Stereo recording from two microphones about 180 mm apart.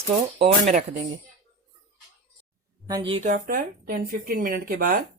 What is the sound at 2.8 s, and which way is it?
Speech, 25° right (ahead or behind).